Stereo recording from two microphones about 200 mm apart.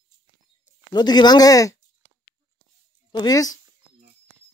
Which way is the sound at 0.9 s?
20° left (ahead or behind).